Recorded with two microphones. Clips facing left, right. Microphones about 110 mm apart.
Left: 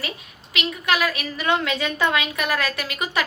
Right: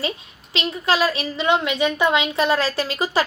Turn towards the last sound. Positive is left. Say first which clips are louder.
# right 4 dB
turn(degrees=-30)  # may be behind; listen again after turning